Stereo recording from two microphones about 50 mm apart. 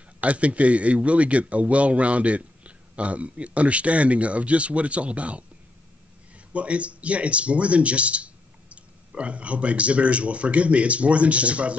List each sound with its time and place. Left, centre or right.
0.2 s speech: right
6.5 s speech: right